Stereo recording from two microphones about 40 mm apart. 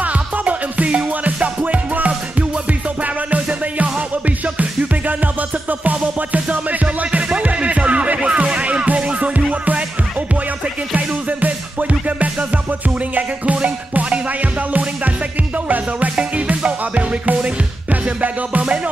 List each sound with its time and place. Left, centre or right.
0.0 s music: right
1.6 s music: right
4.6 s music: right
11.0 s music: right
16.3 s music: right